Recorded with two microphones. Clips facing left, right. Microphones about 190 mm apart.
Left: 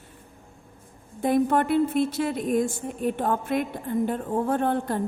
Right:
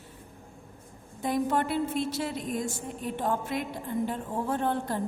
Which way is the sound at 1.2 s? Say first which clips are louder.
Left 6 dB; 55° left (ahead or behind).